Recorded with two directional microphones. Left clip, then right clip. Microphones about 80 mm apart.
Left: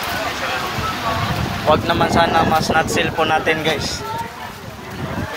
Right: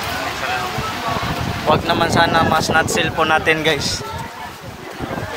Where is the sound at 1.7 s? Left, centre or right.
Right.